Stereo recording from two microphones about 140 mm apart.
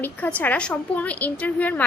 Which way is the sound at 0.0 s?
10° left (ahead or behind).